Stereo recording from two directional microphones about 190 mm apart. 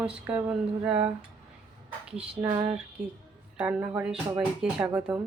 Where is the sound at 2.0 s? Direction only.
10° right (ahead or behind).